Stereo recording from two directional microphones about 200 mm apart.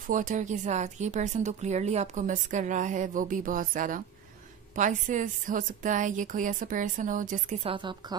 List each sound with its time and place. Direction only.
0.1 s speech: 40° right (ahead or behind); by 8.2 s 25° right (ahead or behind)